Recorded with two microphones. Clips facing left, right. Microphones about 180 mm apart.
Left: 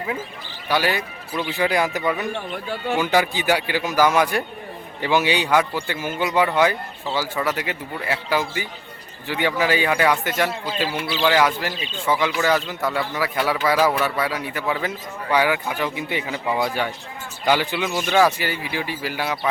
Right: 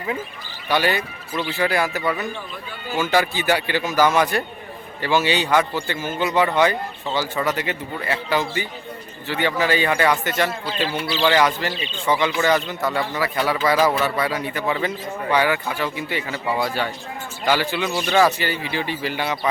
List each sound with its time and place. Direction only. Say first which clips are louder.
0.7 s speech: right 1 dB; 5° left (ahead or behind)
2.3 s speech: left 5 dB; 70° left (ahead or behind)
3.0 s speech: right 2 dB; 15° left (ahead or behind)